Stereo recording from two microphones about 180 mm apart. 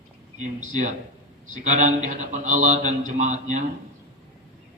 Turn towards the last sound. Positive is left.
turn(degrees=-40)  # may be behind; listen again after turning